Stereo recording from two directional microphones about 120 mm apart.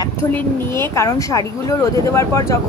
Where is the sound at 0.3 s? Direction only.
20° left (ahead or behind).